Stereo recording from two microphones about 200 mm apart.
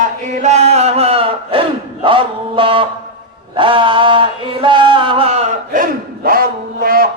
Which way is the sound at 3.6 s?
25° right (ahead or behind).